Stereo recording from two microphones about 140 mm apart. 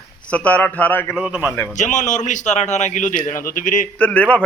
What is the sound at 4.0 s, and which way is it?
Speech, 10° left (ahead or behind).